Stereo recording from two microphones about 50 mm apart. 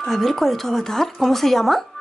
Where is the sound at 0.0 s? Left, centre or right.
Centre.